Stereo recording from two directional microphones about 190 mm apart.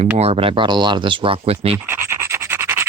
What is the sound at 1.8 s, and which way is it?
Scratch, 10° right (ahead or behind).